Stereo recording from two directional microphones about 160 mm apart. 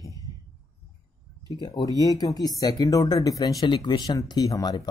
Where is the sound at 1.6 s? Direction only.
25° left (ahead or behind).